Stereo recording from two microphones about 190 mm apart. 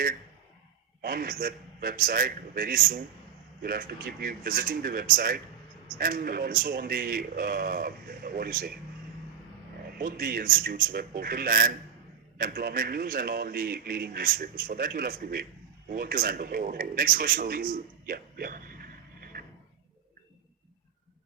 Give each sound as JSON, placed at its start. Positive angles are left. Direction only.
{"t": 1.0, "sound": "a man's voice", "side_deg": -50}
{"t": 10.0, "sound": "a man's voice", "side_deg": -50}